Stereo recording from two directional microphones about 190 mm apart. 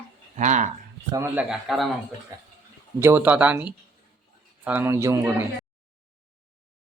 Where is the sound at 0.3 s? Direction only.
40° right (ahead or behind).